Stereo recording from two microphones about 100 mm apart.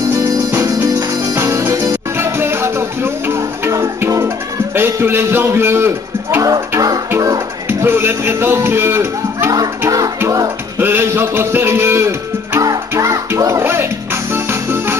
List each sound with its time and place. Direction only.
0.1 s music: 30° right (ahead or behind)
4.7 s a man's voice: 25° right (ahead or behind)
7.1 s music: 30° right (ahead or behind)
9.6 s music: 35° right (ahead or behind)
10.8 s a man's voice: 20° right (ahead or behind)
12.5 s music: 30° right (ahead or behind)